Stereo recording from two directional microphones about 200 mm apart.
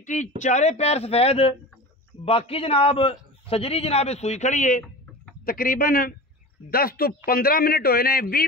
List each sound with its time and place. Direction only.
0.0 s a man's voice: 35° left (ahead or behind)